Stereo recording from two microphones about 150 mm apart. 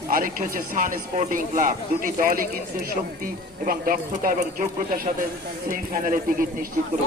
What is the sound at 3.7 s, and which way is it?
Speech, 70° right (ahead or behind).